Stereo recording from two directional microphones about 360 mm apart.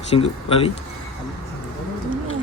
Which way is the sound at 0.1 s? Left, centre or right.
Centre.